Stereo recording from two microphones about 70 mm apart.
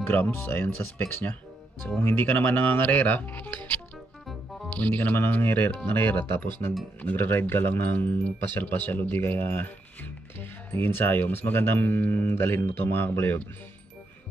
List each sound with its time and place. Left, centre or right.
0.0 s speech: left
5.9 s speech: left
10.7 s speech: left